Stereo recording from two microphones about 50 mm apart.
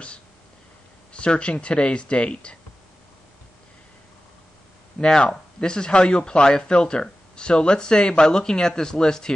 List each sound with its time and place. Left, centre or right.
1.1 s speech: left
5.0 s speech: centre